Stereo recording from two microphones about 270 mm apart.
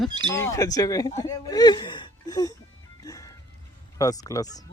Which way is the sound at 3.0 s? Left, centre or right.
Centre.